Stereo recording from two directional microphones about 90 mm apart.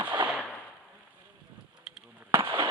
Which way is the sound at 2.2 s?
25° right (ahead or behind).